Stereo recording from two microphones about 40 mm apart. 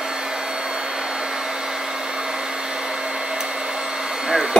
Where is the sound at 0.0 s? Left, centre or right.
Centre.